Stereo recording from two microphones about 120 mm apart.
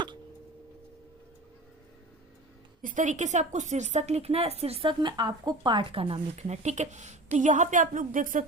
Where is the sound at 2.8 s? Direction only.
90° right.